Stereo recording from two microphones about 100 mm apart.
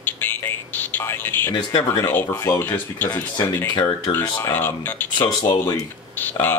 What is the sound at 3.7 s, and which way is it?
Speech, 55° left (ahead or behind).